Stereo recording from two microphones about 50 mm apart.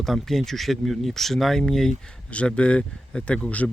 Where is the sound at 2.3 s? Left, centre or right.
Left.